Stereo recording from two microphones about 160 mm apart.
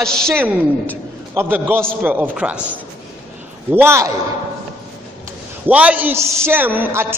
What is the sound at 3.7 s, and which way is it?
Speech, 15° right (ahead or behind).